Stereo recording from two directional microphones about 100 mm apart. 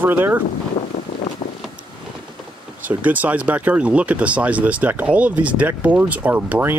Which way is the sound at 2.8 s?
15° right (ahead or behind).